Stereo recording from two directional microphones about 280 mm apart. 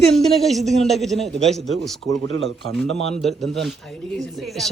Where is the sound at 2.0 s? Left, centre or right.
Centre.